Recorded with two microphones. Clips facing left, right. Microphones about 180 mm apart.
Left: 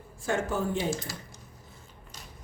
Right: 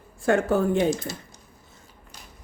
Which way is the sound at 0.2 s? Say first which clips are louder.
Right 8 dB; 60° right (ahead or behind).